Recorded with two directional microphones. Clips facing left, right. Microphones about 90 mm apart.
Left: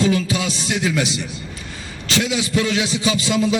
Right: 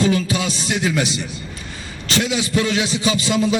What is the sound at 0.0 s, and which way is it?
A man's voice, 40° right (ahead or behind).